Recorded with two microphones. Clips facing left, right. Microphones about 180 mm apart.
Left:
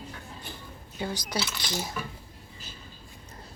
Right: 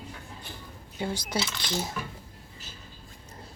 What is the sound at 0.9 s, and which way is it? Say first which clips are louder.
Speech: right 1 dB; 25° right (ahead or behind).